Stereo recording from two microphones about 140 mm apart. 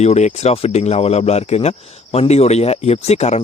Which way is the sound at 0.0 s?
55° left (ahead or behind).